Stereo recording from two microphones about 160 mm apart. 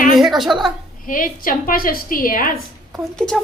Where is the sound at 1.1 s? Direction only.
60° left (ahead or behind).